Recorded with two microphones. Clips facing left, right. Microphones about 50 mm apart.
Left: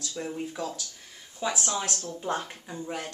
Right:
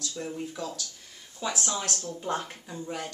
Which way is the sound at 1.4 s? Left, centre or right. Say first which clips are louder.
Left 2 dB; centre.